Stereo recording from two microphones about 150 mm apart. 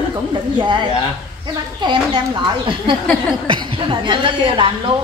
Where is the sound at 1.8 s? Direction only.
30° right (ahead or behind).